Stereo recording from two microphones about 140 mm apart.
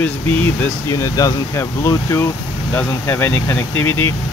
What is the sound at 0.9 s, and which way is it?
Speech, 25° left (ahead or behind).